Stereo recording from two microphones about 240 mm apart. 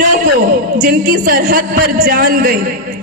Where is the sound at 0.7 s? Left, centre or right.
Right.